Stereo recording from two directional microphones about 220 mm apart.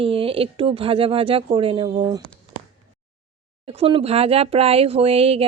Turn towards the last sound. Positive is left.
turn(degrees=-25)  # may be behind; listen again after turning